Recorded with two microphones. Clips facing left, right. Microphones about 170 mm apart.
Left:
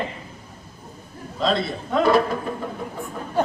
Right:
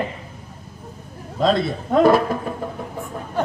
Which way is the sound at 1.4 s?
50° right (ahead or behind).